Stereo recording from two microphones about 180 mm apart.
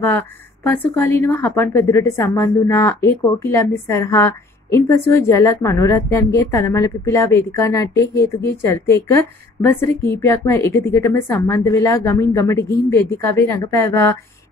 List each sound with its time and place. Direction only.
0.7 s a woman's voice: 10° left (ahead or behind)